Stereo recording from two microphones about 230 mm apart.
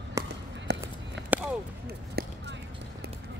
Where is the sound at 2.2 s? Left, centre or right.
Right.